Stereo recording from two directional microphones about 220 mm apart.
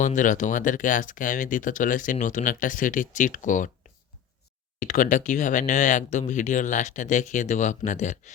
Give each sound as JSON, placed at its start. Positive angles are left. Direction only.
{"t": 0.0, "sound": "speech", "side_deg": 35}
{"t": 4.8, "sound": "speech", "side_deg": 35}